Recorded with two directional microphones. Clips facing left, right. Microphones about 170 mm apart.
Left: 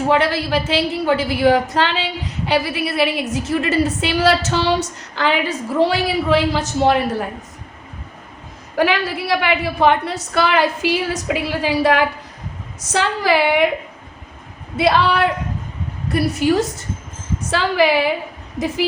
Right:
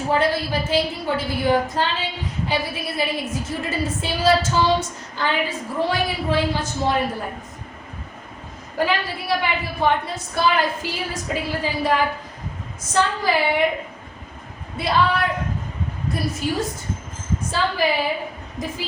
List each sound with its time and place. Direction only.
0.1 s a woman's voice: 75° left (ahead or behind)
8.8 s a woman's voice: 85° left
14.8 s a woman's voice: 75° left (ahead or behind)